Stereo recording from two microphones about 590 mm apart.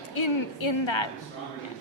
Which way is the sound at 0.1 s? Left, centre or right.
Left.